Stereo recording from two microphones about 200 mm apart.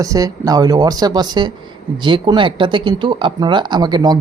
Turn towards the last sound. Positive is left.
turn(degrees=-20)  # may be behind; listen again after turning